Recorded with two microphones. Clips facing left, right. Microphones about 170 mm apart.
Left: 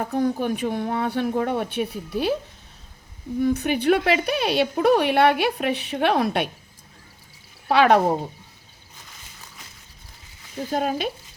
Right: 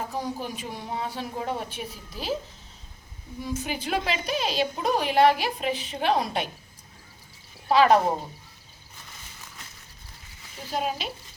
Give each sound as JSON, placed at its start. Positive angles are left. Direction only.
{"t": 0.1, "sound": "a woman's voice", "side_deg": 60}
{"t": 3.4, "sound": "a woman's voice", "side_deg": 65}
{"t": 7.7, "sound": "a woman's voice", "side_deg": 65}
{"t": 10.7, "sound": "speech", "side_deg": 50}